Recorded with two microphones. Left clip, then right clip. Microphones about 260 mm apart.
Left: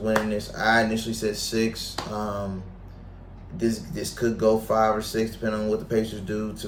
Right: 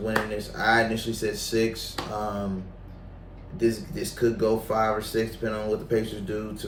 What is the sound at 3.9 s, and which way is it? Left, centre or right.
Speech, centre.